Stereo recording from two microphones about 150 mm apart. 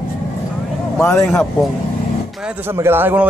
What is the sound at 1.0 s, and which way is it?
Speech, 20° left (ahead or behind).